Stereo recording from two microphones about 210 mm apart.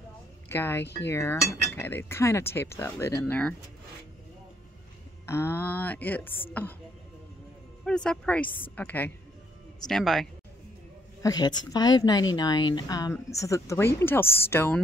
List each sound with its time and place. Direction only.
0.5 s cutlery: 10° left (ahead or behind)
5.2 s cutlery: 10° left (ahead or behind)
7.8 s speech: 5° left (ahead or behind)
8.7 s cutlery: 10° left (ahead or behind)
9.8 s speech: centre (ahead or behind)
11.2 s cutlery: 20° left (ahead or behind)
12.4 s speech: 20° left (ahead or behind)
13.4 s cutlery: 15° left (ahead or behind)